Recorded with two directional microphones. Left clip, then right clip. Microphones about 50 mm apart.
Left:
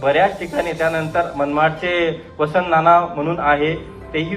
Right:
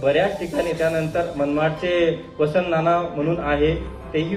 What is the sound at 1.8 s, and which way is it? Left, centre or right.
A man's voice, left.